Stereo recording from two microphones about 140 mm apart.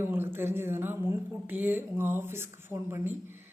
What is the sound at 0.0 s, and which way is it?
A woman's voice, 15° right (ahead or behind).